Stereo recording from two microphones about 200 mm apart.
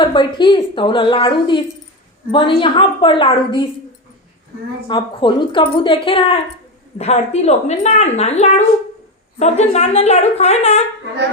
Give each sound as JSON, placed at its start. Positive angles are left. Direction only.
{"t": 0.0, "sound": "a woman's voice", "side_deg": 25}
{"t": 4.9, "sound": "a woman's voice", "side_deg": 25}